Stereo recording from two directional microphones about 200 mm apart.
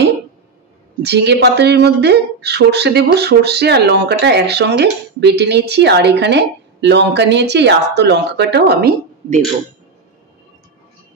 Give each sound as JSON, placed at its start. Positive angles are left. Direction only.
{"t": 1.0, "sound": "speech", "side_deg": -55}